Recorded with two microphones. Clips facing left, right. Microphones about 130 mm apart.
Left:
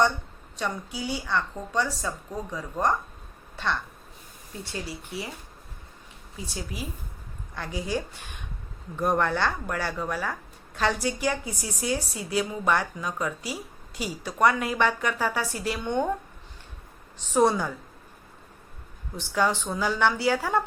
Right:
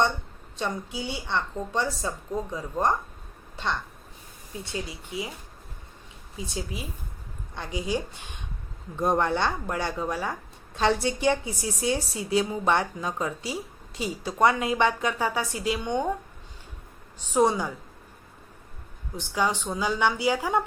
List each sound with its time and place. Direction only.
0.5 s speech: 25° right (ahead or behind)
4.6 s a woman's voice: 15° right (ahead or behind)
6.4 s a woman's voice: 20° right (ahead or behind)
17.2 s a woman's voice: 15° right (ahead or behind)
19.2 s a woman's voice: 15° right (ahead or behind)